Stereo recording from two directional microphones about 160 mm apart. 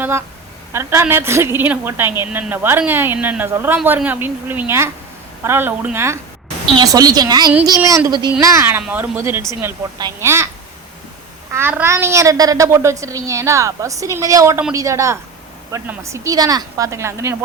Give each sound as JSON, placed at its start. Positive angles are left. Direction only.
{"t": 0.0, "sound": "a woman's voice", "side_deg": -15}
{"t": 11.5, "sound": "a woman's voice", "side_deg": -15}